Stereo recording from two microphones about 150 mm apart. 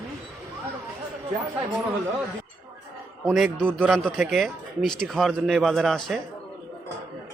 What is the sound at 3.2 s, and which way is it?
A man's voice, centre (ahead or behind).